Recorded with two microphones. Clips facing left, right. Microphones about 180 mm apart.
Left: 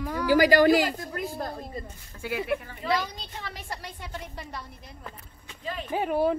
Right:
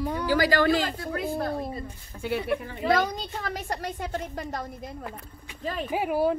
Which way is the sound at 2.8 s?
50° right (ahead or behind).